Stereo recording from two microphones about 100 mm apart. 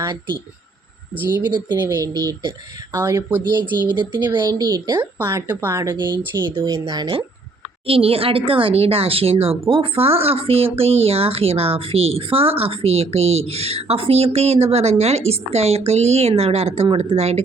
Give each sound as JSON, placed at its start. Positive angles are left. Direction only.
{"t": 1.4, "sound": "speech", "side_deg": -45}
{"t": 2.9, "sound": "speech", "side_deg": -35}
{"t": 5.3, "sound": "speech", "side_deg": -25}
{"t": 6.7, "sound": "speech", "side_deg": -40}
{"t": 7.9, "sound": "speech", "side_deg": -70}